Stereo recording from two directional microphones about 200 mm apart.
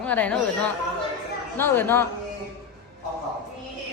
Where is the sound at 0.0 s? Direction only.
5° left (ahead or behind).